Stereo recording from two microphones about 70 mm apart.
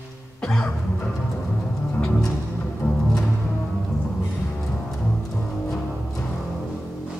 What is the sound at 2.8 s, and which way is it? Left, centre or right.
Music, left.